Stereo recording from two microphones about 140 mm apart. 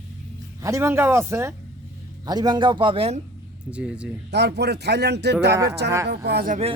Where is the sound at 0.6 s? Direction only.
20° right (ahead or behind).